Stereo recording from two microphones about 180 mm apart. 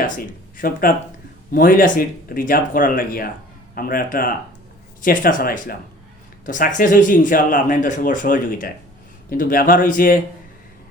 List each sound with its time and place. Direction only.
0.0 s speech: 50° left (ahead or behind)